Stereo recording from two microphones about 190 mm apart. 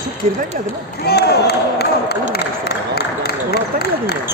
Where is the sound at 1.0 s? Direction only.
60° left (ahead or behind).